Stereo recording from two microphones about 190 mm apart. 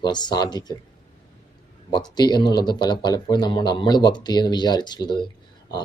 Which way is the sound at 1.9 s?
20° left (ahead or behind).